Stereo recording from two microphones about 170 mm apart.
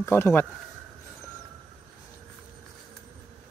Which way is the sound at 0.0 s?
15° left (ahead or behind).